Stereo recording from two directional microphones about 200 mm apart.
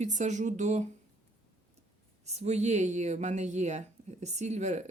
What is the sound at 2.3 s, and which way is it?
Speech, 35° right (ahead or behind).